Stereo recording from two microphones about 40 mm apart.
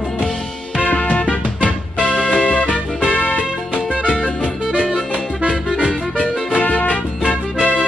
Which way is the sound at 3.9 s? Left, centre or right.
Right.